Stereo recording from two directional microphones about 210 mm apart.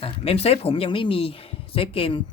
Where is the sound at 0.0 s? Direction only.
30° left (ahead or behind).